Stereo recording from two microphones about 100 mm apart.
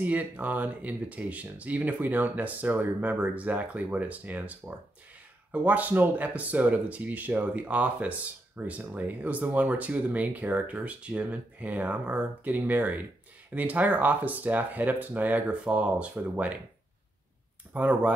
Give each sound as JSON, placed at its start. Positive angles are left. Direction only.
{"t": 0.0, "sound": "speech", "side_deg": -15}
{"t": 17.7, "sound": "speech", "side_deg": -15}